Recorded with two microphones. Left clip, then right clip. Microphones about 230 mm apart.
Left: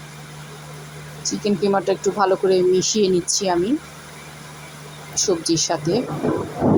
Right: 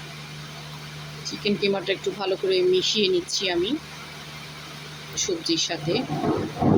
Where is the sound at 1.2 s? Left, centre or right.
Centre.